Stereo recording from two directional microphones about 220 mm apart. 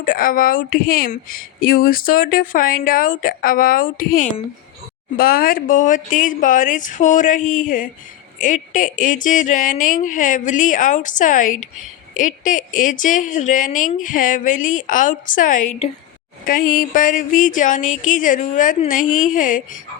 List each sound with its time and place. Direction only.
0.0 s speech: 40° left (ahead or behind)